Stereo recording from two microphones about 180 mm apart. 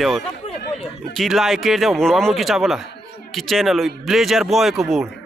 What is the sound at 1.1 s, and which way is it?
A man's voice, centre (ahead or behind).